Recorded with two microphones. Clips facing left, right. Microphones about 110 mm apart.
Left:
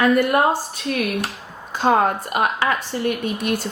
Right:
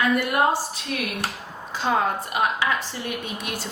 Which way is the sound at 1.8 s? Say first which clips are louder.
Left 6 dB; 55° left (ahead or behind).